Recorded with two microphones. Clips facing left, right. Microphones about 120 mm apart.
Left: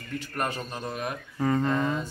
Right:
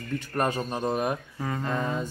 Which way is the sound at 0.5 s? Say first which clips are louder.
Right 6 dB; 30° right (ahead or behind).